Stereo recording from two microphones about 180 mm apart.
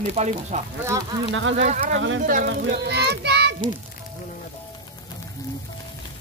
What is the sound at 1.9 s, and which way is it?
Speech, 90° right.